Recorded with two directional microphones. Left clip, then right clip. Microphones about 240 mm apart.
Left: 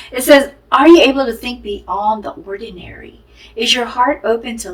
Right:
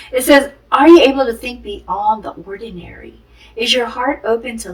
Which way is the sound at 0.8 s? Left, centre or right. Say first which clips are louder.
Even; left.